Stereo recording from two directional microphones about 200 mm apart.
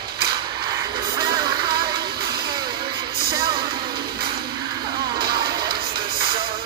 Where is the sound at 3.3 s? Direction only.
25° right (ahead or behind).